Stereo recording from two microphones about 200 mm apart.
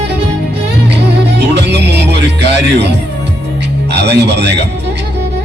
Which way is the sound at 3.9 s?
55° right (ahead or behind).